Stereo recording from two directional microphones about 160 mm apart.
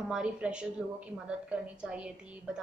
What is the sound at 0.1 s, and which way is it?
A woman's voice, 5° right (ahead or behind).